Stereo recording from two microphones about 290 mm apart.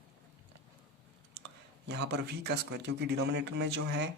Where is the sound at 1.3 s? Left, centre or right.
Right.